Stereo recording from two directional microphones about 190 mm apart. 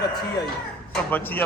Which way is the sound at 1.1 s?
10° left (ahead or behind).